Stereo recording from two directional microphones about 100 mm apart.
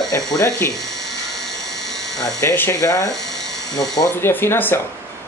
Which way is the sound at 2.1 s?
40° left (ahead or behind).